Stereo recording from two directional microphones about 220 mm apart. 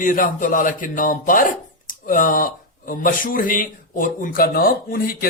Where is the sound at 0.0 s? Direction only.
40° left (ahead or behind).